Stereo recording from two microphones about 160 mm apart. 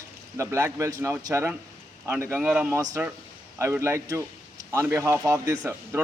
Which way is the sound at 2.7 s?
20° right (ahead or behind).